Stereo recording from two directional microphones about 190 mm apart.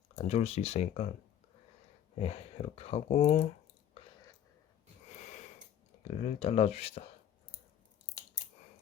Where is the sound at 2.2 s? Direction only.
35° left (ahead or behind).